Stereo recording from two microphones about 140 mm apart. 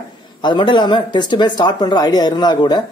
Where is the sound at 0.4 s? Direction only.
35° left (ahead or behind).